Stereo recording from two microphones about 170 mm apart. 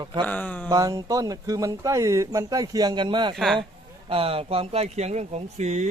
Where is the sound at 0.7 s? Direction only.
20° right (ahead or behind).